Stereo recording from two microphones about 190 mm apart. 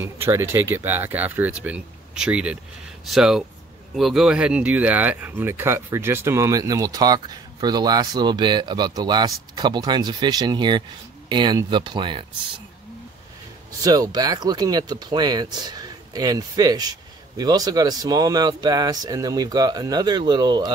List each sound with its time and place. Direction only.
0.0 s speech: 15° right (ahead or behind)
13.7 s speech: 20° right (ahead or behind)